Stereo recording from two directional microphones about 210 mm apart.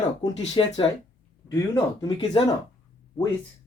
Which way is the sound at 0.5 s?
25° left (ahead or behind).